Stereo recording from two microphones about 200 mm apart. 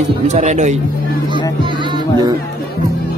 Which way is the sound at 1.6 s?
25° right (ahead or behind).